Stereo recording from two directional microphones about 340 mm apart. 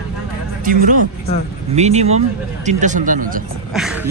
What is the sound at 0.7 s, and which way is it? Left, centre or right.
Speech, right.